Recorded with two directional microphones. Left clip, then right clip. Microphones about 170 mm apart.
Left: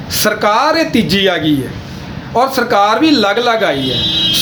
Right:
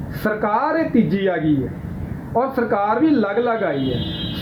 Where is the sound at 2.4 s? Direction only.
45° left (ahead or behind).